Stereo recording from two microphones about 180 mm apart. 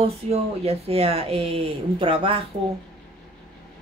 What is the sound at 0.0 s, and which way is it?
Speech, 35° right (ahead or behind).